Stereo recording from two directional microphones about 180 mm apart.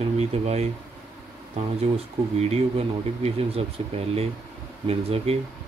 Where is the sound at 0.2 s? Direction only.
35° right (ahead or behind).